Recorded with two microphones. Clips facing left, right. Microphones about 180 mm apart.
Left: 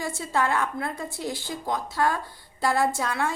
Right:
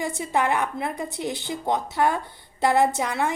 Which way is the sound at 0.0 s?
20° right (ahead or behind).